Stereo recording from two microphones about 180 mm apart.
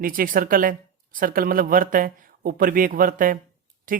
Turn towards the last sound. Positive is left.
turn(degrees=-50)  # may be behind; listen again after turning